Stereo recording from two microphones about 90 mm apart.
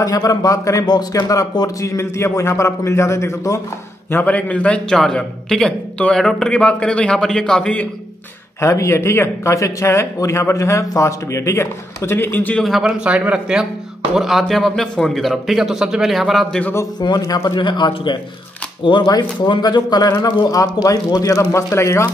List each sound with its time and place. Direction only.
0.0 s speech: 40° left (ahead or behind)
4.1 s a man's voice: 15° left (ahead or behind)
8.5 s speech: 35° left (ahead or behind)
12.8 s a man's voice: 10° right (ahead or behind)
17.0 s speech: 45° left (ahead or behind)
17.6 s a man's voice: 60° left (ahead or behind); by 22.1 s 30° left (ahead or behind)